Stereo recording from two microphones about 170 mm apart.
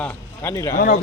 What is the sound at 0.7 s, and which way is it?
Speech, 60° left (ahead or behind).